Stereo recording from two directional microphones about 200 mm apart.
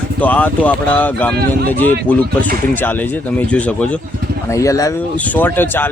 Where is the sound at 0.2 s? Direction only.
10° left (ahead or behind).